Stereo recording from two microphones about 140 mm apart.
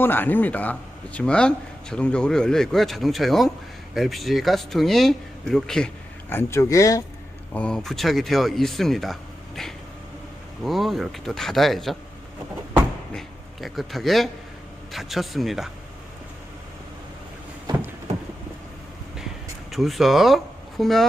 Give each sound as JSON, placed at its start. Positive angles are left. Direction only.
{"t": 0.0, "sound": "speech", "side_deg": 15}
{"t": 6.3, "sound": "speech", "side_deg": 20}
{"t": 7.5, "sound": "speech", "side_deg": 5}
{"t": 10.6, "sound": "speech", "side_deg": 0}
{"t": 13.1, "sound": "a sound", "side_deg": 0}
{"t": 14.9, "sound": "speech", "side_deg": 0}
{"t": 19.7, "sound": "speech", "side_deg": 0}